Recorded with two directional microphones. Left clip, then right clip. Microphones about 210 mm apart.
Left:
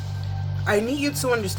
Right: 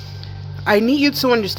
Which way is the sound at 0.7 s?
45° right (ahead or behind).